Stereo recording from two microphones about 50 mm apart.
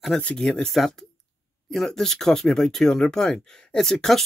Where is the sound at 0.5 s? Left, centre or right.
Centre.